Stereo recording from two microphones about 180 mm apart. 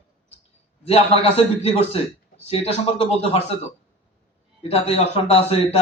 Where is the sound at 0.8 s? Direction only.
35° left (ahead or behind).